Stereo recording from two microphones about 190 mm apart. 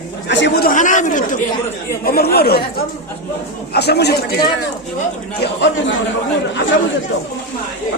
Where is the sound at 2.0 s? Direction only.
55° left (ahead or behind).